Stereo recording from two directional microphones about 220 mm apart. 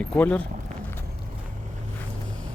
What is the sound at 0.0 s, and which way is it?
Speech, 5° left (ahead or behind).